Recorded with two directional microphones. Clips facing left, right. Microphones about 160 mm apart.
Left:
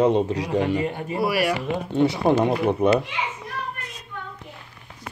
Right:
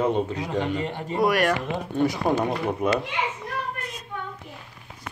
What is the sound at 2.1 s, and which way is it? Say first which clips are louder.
Speech: left 4 dB; 25° left (ahead or behind).